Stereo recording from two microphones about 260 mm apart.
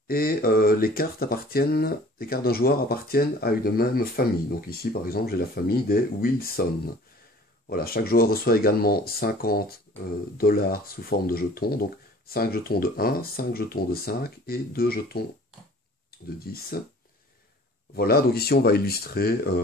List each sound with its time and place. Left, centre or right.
0.1 s speech: left
7.7 s speech: left
16.5 s speech: left
17.9 s speech: left